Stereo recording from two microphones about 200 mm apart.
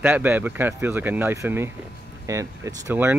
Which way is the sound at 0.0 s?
10° right (ahead or behind).